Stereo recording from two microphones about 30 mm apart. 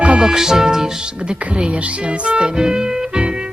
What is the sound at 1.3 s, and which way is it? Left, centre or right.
Speech, right.